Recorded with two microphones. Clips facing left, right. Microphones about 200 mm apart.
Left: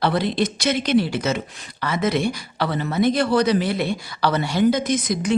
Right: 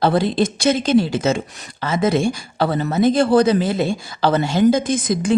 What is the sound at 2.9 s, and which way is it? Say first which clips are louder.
A woman's voice: right 4 dB; 30° right (ahead or behind).